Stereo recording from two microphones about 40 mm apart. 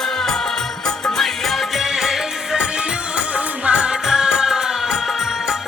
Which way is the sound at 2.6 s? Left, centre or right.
Right.